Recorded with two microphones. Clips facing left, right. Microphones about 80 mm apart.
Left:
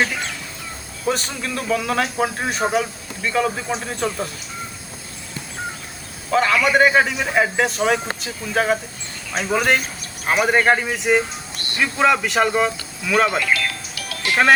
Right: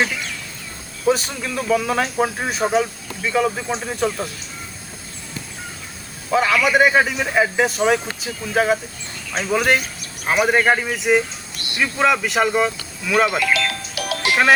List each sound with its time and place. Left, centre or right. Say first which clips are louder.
1.0 s speech: right 4 dB; centre
6.3 s speech: even; centre
11.5 s music: left 1 dB; left
11.8 s speech: left 1 dB; centre
13.9 s music: right 7 dB; right